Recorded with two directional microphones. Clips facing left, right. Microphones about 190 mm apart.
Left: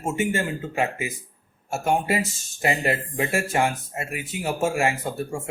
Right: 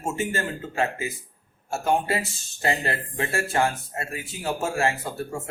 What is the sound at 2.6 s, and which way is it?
A man's voice, 15° left (ahead or behind).